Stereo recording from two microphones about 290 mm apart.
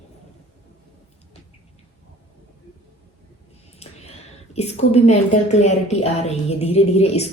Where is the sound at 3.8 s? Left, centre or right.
Left.